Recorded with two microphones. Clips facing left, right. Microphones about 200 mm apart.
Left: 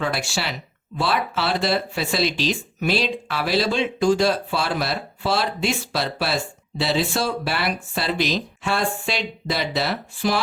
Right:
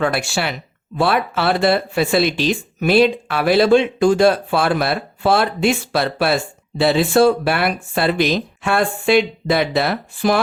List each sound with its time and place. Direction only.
0.0 s speech: 55° right (ahead or behind)